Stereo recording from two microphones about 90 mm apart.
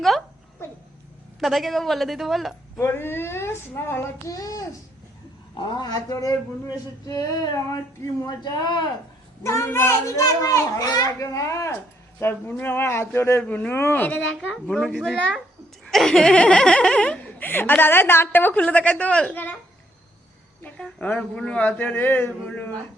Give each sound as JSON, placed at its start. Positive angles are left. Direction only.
{"t": 1.4, "sound": "a woman's voice", "side_deg": 0}
{"t": 2.7, "sound": "speech", "side_deg": 25}
{"t": 4.3, "sound": "a child's voice", "side_deg": 40}
{"t": 5.7, "sound": "speech", "side_deg": 45}
{"t": 8.3, "sound": "speech", "side_deg": 50}
{"t": 9.4, "sound": "a child's voice", "side_deg": 30}
{"t": 12.2, "sound": "speech", "side_deg": 20}
{"t": 14.5, "sound": "speech", "side_deg": 10}
{"t": 20.6, "sound": "a sound", "side_deg": 15}
{"t": 21.0, "sound": "speech", "side_deg": 15}